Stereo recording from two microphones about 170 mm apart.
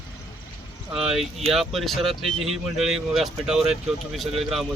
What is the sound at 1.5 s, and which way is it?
Speech, centre (ahead or behind).